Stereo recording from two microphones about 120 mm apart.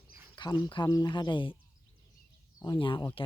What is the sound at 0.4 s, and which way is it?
Cricket, 40° left (ahead or behind).